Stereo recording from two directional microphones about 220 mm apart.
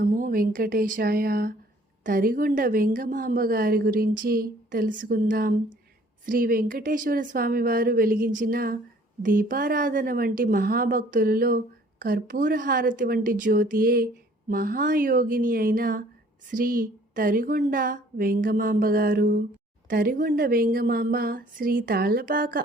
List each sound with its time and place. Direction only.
0.0 s a woman's voice: 35° right (ahead or behind)